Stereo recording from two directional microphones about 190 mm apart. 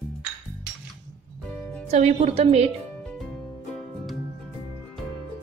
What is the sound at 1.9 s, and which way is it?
Speech, 35° right (ahead or behind).